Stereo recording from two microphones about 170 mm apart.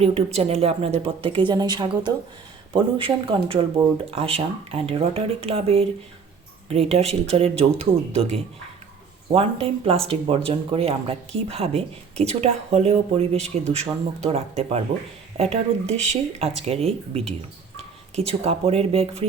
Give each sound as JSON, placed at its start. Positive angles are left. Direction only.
{"t": 0.0, "sound": "speech", "side_deg": -40}